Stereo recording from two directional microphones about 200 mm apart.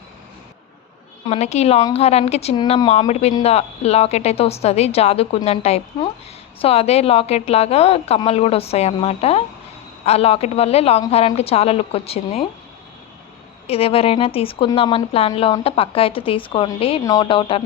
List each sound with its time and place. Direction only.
1.3 s a woman's voice: 35° left (ahead or behind)
13.7 s speech: 30° left (ahead or behind)